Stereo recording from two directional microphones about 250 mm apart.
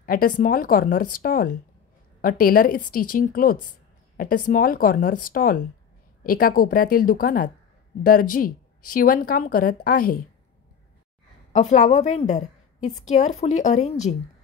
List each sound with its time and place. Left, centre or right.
0.0 s speech: left
11.5 s a woman's voice: left